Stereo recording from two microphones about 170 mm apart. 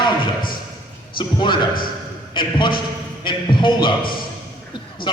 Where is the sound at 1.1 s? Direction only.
25° left (ahead or behind).